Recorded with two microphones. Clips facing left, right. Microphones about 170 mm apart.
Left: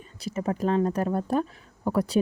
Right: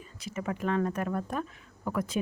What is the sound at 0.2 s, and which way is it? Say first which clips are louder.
Speech: left 6 dB; 35° left (ahead or behind).